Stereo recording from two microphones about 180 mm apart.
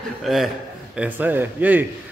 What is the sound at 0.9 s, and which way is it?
Speech, 10° right (ahead or behind).